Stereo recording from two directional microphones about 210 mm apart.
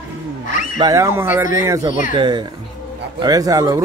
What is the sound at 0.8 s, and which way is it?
Speech, 15° right (ahead or behind).